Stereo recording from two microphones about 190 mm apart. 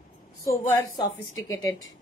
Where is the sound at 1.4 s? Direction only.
20° left (ahead or behind).